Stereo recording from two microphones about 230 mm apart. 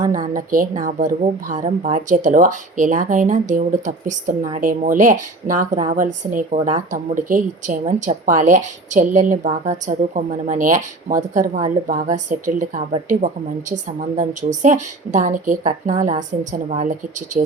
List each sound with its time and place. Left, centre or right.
0.3 s speech: right